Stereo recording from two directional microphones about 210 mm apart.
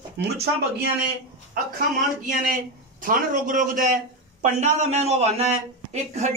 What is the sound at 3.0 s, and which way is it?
A man's voice, 40° right (ahead or behind).